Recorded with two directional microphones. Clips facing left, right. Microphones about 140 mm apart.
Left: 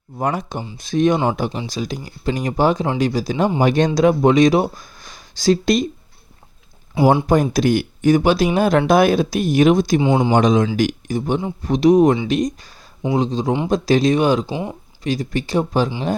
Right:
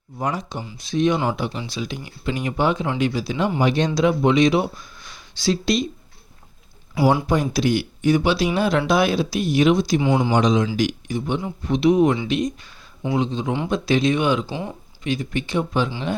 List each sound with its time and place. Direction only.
0.2 s speech: 55° left (ahead or behind)
7.0 s speech: 25° left (ahead or behind)
7.5 s speech: 45° left (ahead or behind)
10.0 s speech: 25° left (ahead or behind)
10.3 s speech: 50° left (ahead or behind)
14.4 s speech: 20° left (ahead or behind)
15.0 s speech: 40° left (ahead or behind)